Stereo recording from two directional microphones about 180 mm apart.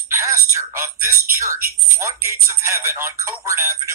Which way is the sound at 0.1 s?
15° right (ahead or behind).